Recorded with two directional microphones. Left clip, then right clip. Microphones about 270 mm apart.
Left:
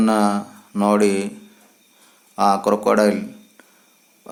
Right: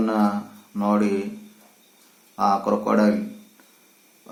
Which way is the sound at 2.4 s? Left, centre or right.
Left.